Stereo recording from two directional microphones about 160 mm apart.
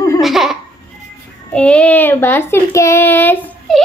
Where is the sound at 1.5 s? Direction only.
5° left (ahead or behind).